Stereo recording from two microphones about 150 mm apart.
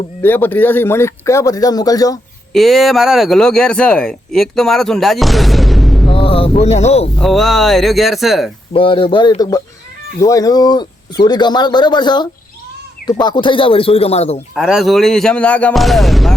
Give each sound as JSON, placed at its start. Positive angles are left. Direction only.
{"t": 0.2, "sound": "a man's voice", "side_deg": 10}
{"t": 2.5, "sound": "speech", "side_deg": 0}
{"t": 6.1, "sound": "speech", "side_deg": 40}
{"t": 7.2, "sound": "speech", "side_deg": 0}
{"t": 8.7, "sound": "a man's voice", "side_deg": 35}
{"t": 14.5, "sound": "speech", "side_deg": 0}